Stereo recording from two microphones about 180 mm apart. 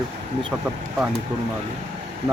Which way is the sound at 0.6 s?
5° right (ahead or behind).